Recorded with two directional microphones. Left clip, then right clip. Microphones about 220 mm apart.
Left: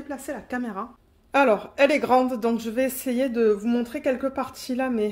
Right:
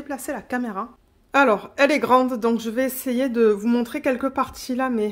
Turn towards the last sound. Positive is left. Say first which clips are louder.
# right 2 dB
turn(degrees=-15)  # may be behind; listen again after turning